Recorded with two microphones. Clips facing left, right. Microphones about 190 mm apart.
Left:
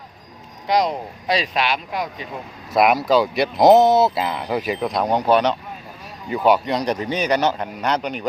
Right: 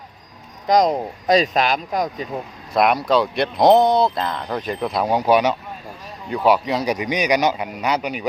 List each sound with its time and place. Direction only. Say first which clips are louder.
0.7 s speech: right 3 dB; 45° right (ahead or behind)
2.7 s a man's voice: left 1 dB; 5° left (ahead or behind)